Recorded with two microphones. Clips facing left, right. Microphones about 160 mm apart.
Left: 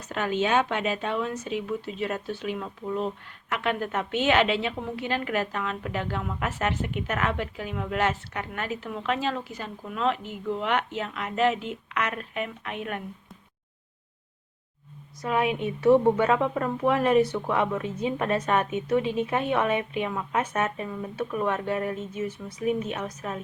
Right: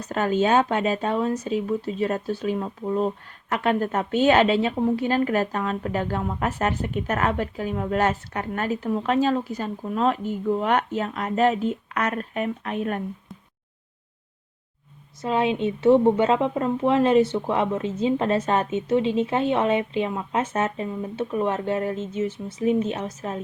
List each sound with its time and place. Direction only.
0.0 s a woman's voice: 40° right (ahead or behind)
15.2 s a woman's voice: 25° right (ahead or behind)